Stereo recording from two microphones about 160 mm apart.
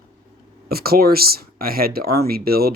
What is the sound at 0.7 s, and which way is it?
Speech, 70° right (ahead or behind).